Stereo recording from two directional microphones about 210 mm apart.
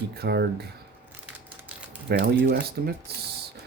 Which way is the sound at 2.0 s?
50° right (ahead or behind).